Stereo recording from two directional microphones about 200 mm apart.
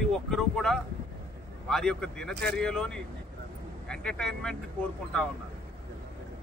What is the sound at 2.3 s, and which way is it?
Speech, 55° right (ahead or behind).